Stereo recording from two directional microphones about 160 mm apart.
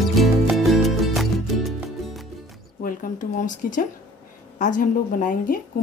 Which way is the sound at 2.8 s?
60° left (ahead or behind).